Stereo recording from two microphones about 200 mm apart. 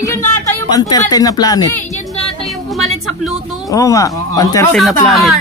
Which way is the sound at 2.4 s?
Centre (ahead or behind).